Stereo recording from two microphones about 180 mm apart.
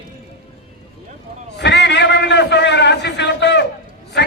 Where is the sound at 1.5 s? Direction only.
75° left (ahead or behind).